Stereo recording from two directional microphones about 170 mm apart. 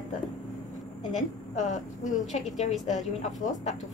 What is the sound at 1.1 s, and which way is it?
Speech, 45° left (ahead or behind).